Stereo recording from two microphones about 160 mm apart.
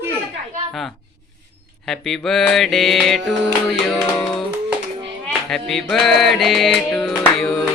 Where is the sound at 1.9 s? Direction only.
Centre (ahead or behind).